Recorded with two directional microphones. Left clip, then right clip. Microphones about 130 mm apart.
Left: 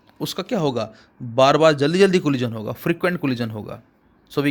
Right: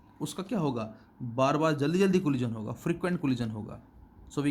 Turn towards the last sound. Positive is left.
turn(degrees=35)  # may be behind; listen again after turning